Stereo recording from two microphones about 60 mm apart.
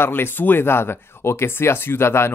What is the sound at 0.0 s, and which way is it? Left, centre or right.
Speech, left.